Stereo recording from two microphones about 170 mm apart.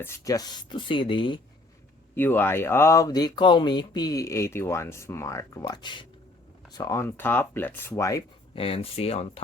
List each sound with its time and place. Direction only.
0.0 s speech: 15° left (ahead or behind)
2.1 s speech: 10° left (ahead or behind)
8.5 s speech: 35° left (ahead or behind)